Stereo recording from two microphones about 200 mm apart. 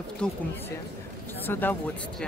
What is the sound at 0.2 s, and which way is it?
Speech, 5° left (ahead or behind).